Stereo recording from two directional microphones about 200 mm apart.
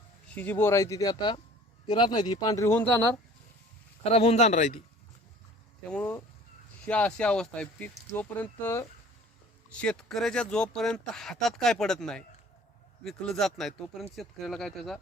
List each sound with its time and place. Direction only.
0.3 s speech: 10° left (ahead or behind)
4.0 s speech: 30° left (ahead or behind)
5.9 s speech: 10° left (ahead or behind)